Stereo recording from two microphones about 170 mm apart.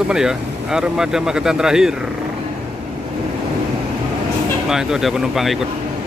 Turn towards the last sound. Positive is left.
turn(degrees=0)  # may be behind; listen again after turning